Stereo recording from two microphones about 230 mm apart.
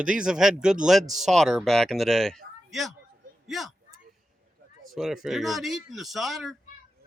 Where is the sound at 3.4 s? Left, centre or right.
Centre.